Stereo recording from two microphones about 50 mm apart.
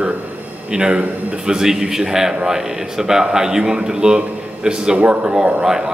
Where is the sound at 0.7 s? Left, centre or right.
Centre.